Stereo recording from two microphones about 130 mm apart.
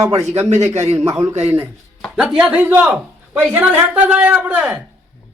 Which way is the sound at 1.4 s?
15° right (ahead or behind).